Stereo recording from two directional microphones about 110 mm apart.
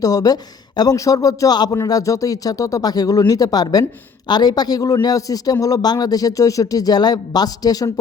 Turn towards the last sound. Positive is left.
turn(degrees=35)  # may be behind; listen again after turning